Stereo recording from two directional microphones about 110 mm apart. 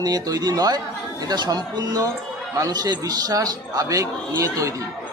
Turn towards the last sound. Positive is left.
turn(degrees=-30)  # may be behind; listen again after turning